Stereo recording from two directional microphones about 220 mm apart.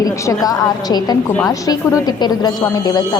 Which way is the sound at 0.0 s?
15° left (ahead or behind).